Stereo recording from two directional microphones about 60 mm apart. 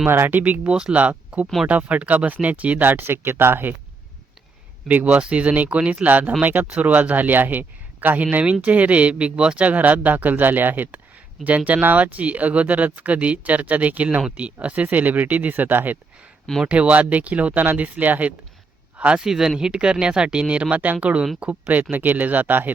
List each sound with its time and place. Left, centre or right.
0.1 s speech: right
0.7 s speech: centre; by 3.8 s right
5.0 s speech: centre
16.6 s speech: right
19.2 s speech: centre; by 22.7 s right